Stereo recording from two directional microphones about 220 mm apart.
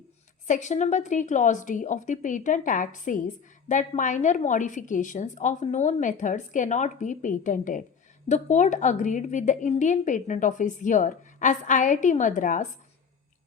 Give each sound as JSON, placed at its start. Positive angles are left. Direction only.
{"t": 0.4, "sound": "a woman's voice", "side_deg": 35}